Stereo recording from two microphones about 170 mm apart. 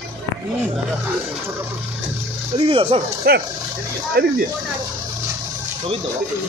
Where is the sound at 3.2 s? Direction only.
65° right (ahead or behind).